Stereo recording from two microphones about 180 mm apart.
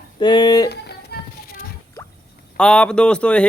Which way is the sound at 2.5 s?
5° left (ahead or behind).